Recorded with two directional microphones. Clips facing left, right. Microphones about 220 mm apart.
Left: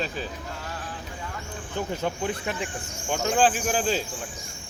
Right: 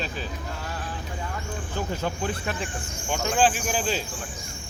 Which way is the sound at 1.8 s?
20° left (ahead or behind).